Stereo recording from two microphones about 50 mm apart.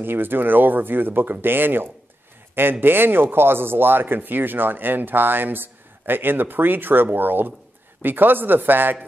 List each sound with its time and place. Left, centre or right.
0.0 s speech: right